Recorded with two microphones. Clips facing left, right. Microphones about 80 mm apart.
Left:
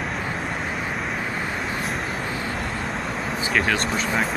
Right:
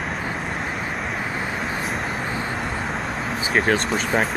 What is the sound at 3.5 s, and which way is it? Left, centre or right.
Speech, right.